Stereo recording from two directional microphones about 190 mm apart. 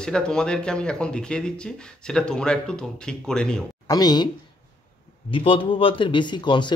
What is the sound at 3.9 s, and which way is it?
Speech, 20° left (ahead or behind).